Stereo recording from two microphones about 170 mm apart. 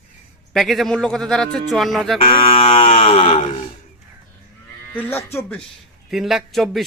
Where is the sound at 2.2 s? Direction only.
35° left (ahead or behind).